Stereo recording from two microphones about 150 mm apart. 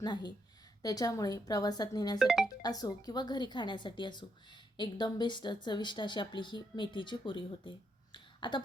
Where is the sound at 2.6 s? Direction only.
25° left (ahead or behind).